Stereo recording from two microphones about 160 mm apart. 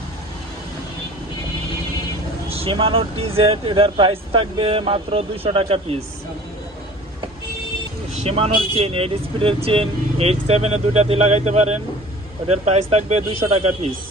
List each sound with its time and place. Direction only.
2.5 s speech: 35° right (ahead or behind)
8.2 s speech: 40° right (ahead or behind)